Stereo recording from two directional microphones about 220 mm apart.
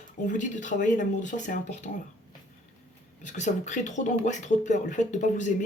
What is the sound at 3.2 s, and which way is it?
Speech, 35° left (ahead or behind).